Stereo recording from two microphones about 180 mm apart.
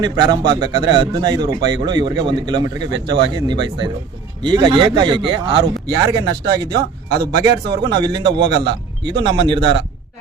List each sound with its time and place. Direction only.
0.0 s speech: 25° right (ahead or behind)